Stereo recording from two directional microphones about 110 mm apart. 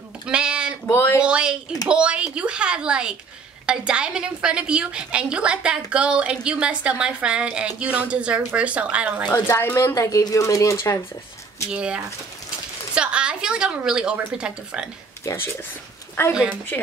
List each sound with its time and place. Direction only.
0.3 s a sound: 10° right (ahead or behind)
0.8 s speech: 20° left (ahead or behind)
1.2 s a woman's voice: 10° right (ahead or behind)
9.3 s speech: 20° left (ahead or behind)
11.7 s a woman's voice: 10° right (ahead or behind)
15.2 s speech: 25° left (ahead or behind)